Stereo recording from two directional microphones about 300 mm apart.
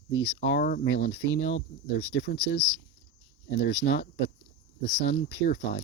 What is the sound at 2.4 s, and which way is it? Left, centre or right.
Speech, centre.